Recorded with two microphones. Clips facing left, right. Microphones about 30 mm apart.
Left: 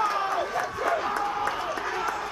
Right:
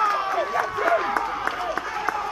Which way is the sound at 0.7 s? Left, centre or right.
Right.